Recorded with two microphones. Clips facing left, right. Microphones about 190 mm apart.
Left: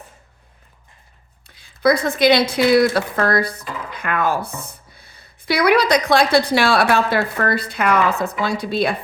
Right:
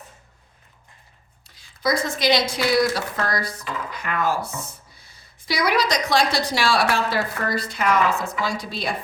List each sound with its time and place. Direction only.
1.5 s speech: 60° left (ahead or behind)